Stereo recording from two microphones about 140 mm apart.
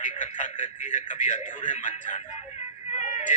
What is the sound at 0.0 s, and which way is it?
Speech, 65° left (ahead or behind).